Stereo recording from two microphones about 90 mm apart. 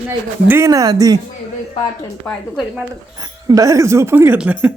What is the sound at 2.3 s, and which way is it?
Speech, 15° left (ahead or behind).